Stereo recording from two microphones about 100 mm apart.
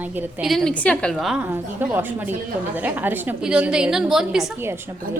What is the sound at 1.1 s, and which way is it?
Speech, centre (ahead or behind).